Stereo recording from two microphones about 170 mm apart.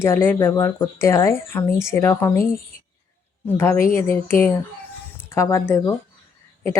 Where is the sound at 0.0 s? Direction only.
15° left (ahead or behind).